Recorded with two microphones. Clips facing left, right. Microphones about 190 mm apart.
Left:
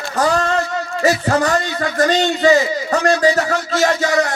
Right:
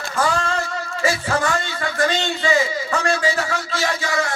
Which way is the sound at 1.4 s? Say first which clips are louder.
Left 5 dB; 40° left (ahead or behind).